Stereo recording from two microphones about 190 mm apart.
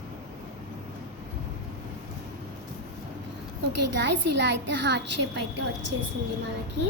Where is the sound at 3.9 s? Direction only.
65° right (ahead or behind).